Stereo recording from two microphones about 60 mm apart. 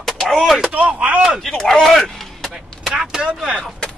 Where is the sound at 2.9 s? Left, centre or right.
Centre.